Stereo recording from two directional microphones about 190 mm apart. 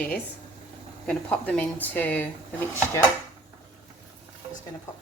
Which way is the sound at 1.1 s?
5° left (ahead or behind).